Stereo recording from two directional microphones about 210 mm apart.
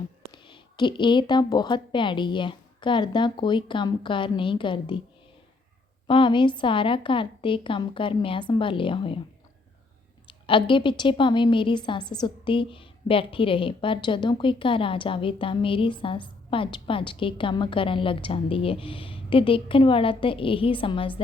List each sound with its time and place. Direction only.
0.3 s a woman's voice: 25° left (ahead or behind)
6.1 s a woman's voice: 25° left (ahead or behind)
10.2 s a woman's voice: 25° left (ahead or behind)